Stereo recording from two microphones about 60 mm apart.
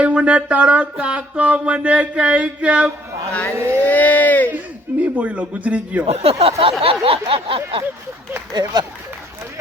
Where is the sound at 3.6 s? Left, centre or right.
Right.